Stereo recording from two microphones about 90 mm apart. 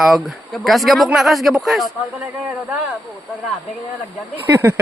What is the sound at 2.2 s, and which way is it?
Speech, 20° right (ahead or behind).